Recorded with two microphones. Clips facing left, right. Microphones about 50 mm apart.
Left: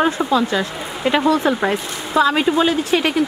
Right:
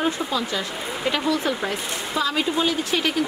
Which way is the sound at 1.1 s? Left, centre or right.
Left.